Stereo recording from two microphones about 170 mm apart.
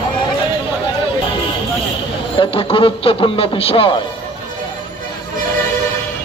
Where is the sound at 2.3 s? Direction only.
30° left (ahead or behind).